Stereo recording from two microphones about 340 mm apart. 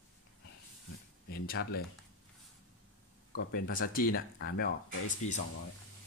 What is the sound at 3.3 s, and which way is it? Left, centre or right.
Speech, left.